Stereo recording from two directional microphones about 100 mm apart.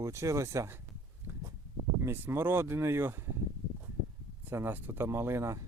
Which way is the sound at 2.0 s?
25° right (ahead or behind).